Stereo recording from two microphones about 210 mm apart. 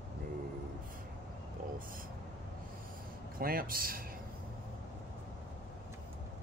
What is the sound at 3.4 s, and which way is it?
Speech, 45° right (ahead or behind).